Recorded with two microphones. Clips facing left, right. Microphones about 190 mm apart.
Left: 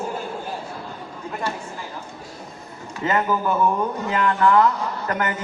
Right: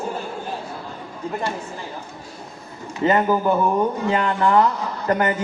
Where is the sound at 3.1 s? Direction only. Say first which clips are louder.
Right 3 dB; 25° right (ahead or behind).